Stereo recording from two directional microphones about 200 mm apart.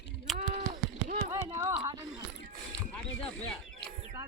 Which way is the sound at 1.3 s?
15° right (ahead or behind).